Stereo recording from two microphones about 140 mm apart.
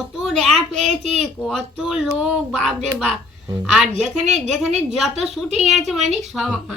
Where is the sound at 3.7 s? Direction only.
Centre (ahead or behind).